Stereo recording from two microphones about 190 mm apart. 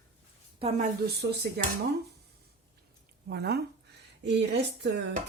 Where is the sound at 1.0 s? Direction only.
60° right (ahead or behind).